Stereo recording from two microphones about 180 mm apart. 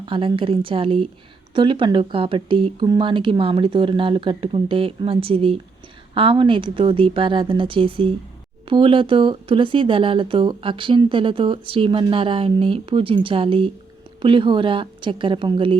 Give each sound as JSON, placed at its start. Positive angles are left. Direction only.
{"t": 0.0, "sound": "speech", "side_deg": -30}